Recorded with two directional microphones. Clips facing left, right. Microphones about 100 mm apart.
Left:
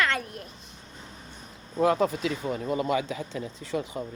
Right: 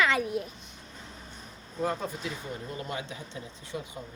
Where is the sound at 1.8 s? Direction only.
80° left.